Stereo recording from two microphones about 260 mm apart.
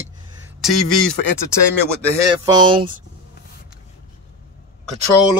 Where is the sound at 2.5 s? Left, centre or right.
Centre.